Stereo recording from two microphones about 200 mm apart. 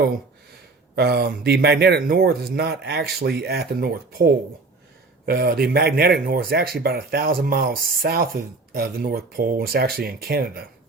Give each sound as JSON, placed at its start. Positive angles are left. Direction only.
{"t": 0.9, "sound": "speech", "side_deg": -55}